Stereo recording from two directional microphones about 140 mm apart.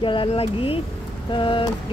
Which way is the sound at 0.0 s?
40° left (ahead or behind).